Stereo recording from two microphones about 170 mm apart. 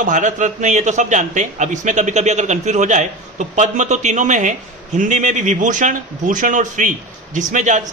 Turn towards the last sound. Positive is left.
turn(degrees=-45)  # may be behind; listen again after turning